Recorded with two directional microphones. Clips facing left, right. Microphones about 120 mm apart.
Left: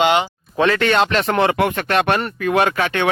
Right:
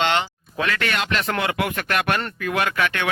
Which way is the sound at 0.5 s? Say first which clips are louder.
Left 8 dB; 35° left (ahead or behind).